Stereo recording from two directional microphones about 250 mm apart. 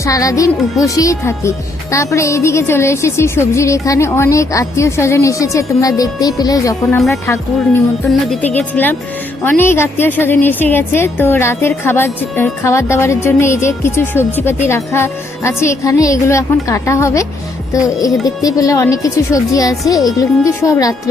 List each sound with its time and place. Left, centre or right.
0.0 s speech: centre
18.4 s speech: centre